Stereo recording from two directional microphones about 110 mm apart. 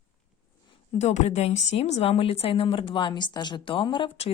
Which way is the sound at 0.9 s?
90° left.